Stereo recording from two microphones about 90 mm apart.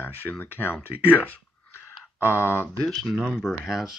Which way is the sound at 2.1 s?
30° left (ahead or behind).